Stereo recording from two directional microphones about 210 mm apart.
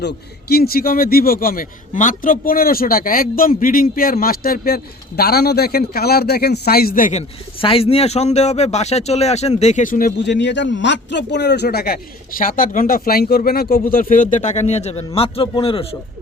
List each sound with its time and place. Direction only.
0.0 s a man's voice: 50° left (ahead or behind); by 15.9 s 25° left (ahead or behind)